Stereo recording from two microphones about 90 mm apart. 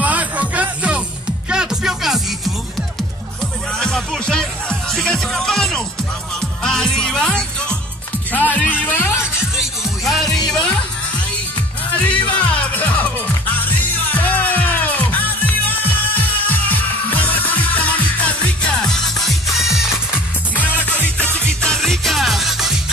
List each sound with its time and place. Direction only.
0.0 s music: 15° right (ahead or behind)
3.7 s music: 5° left (ahead or behind)
6.6 s speech: 5° left (ahead or behind)
8.3 s music: 20° left (ahead or behind)
9.6 s music: centre (ahead or behind)
12.0 s music: 15° left (ahead or behind); by 20.0 s 5° right (ahead or behind)
20.5 s music: 15° left (ahead or behind); by 22.8 s centre (ahead or behind)